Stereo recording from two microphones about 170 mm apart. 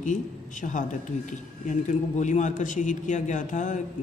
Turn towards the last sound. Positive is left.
turn(degrees=45)  # may be behind; listen again after turning